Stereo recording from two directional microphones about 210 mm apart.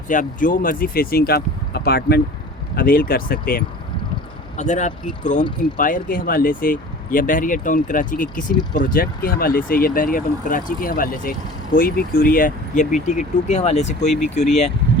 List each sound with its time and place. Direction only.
0.1 s speech: 40° left (ahead or behind)